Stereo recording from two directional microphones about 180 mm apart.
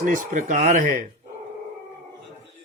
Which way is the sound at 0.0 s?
45° right (ahead or behind).